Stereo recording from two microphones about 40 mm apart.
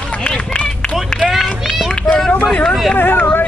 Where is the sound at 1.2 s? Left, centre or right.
Centre.